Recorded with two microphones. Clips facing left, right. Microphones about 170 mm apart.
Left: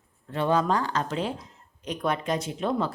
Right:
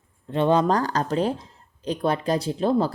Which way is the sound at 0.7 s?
40° right (ahead or behind).